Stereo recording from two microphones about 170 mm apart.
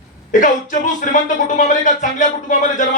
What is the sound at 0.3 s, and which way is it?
Speech, 50° left (ahead or behind).